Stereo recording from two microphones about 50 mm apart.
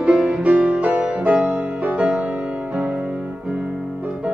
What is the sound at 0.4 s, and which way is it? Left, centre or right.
Music, right.